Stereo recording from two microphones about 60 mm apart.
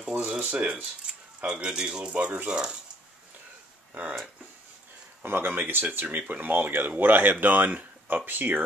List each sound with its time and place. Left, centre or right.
0.1 s speech: right
1.0 s speech: centre
5.2 s speech: right